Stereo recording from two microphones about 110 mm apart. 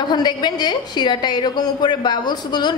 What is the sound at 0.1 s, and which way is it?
A woman's voice, 40° left (ahead or behind).